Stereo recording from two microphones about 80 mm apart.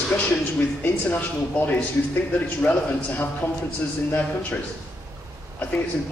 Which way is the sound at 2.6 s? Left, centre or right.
Left.